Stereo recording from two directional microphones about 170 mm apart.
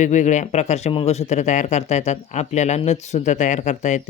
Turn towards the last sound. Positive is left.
turn(degrees=45)  # may be behind; listen again after turning